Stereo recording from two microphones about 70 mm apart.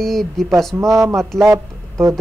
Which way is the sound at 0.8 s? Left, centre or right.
Right.